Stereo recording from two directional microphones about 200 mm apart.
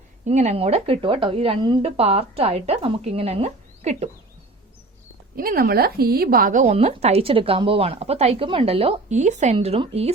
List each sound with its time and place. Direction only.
0.3 s a woman's voice: 35° right (ahead or behind)
5.4 s a woman's voice: 45° right (ahead or behind); by 10.1 s 30° right (ahead or behind)